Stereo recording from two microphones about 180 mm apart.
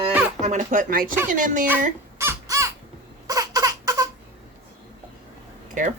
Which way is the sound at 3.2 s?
20° right (ahead or behind).